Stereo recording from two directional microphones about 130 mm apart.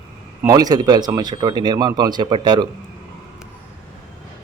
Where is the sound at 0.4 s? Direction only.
30° right (ahead or behind).